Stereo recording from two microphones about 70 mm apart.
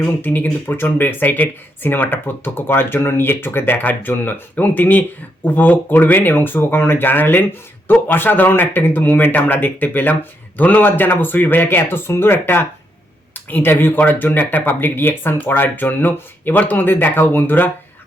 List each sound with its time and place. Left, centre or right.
0.0 s speech: left